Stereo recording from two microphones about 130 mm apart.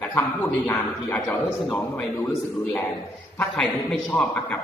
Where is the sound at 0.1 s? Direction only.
20° left (ahead or behind).